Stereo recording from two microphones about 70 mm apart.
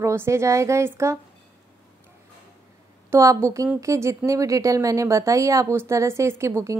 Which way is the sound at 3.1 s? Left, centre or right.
Right.